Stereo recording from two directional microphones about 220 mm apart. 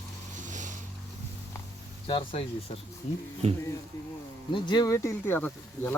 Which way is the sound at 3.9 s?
15° left (ahead or behind).